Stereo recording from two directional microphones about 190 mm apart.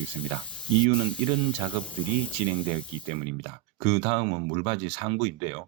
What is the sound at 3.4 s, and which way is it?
Speech, 30° right (ahead or behind).